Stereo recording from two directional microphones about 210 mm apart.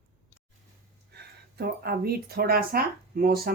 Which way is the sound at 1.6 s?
45° right (ahead or behind).